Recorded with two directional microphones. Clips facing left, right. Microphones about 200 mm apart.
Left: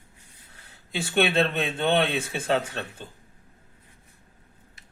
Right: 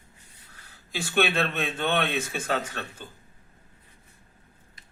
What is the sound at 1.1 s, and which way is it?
A man's voice, 30° left (ahead or behind).